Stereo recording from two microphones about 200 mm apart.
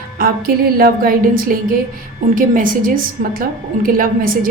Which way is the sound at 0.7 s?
50° right (ahead or behind).